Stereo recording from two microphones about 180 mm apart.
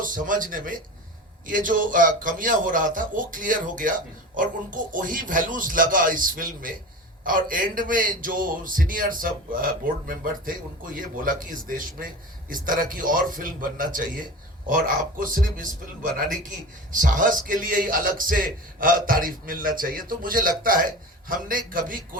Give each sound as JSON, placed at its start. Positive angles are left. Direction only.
{"t": 0.0, "sound": "a man's voice", "side_deg": -50}
{"t": 16.9, "sound": "a man's voice", "side_deg": -45}